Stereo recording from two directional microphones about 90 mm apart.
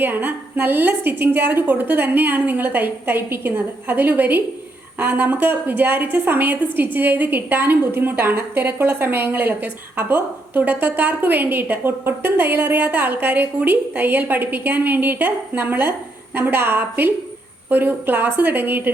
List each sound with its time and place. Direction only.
0.0 s a woman's voice: 20° right (ahead or behind)